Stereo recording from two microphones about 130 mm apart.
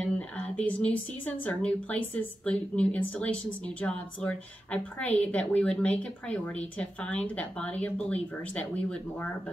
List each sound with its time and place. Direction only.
0.0 s a woman's voice: 10° left (ahead or behind)